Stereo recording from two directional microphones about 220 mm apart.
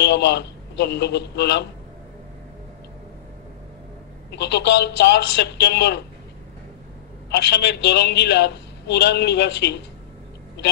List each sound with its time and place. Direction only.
0.0 s a man's voice: 50° left (ahead or behind)
4.3 s a man's voice: 50° left (ahead or behind)
7.2 s a man's voice: 50° left (ahead or behind)